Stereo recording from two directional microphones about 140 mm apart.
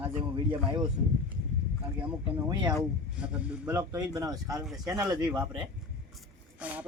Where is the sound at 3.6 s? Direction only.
25° right (ahead or behind).